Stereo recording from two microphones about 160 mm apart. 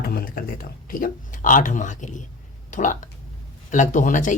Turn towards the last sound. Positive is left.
turn(degrees=55)  # may be behind; listen again after turning